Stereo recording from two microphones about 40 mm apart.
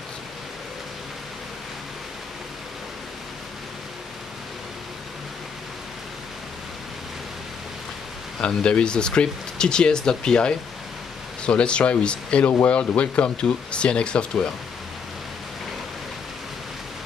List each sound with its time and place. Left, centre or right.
8.4 s speech: left